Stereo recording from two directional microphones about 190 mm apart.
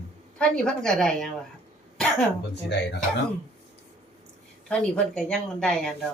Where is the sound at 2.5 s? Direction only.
65° left (ahead or behind).